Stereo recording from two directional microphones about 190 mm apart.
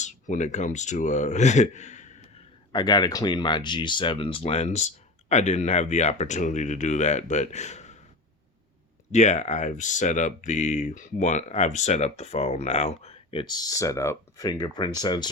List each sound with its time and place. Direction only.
0.0 s speech: 40° left (ahead or behind)
2.7 s speech: 20° left (ahead or behind); by 7.9 s 35° left (ahead or behind)
9.1 s speech: 35° left (ahead or behind)